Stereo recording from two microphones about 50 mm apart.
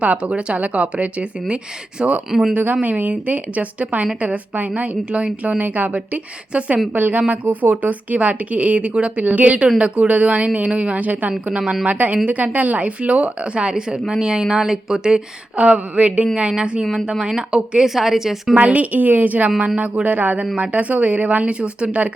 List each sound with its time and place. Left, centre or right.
0.0 s a woman's voice: right
2.5 s a woman's voice: right
11.3 s speech: right
11.9 s a woman's voice: right; by 15.2 s centre
15.5 s a woman's voice: right
16.2 s speech: centre
18.5 s a woman's voice: right
19.5 s a woman's voice: right